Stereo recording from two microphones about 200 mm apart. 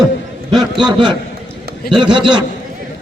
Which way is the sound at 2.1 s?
25° right (ahead or behind).